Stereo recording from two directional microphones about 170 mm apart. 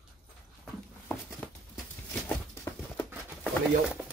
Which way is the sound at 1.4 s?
10° left (ahead or behind).